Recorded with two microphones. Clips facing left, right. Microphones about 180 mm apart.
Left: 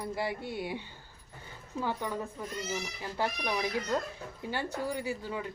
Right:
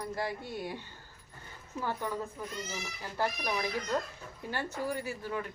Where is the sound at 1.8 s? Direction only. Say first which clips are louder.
Left 1 dB; 15° left (ahead or behind).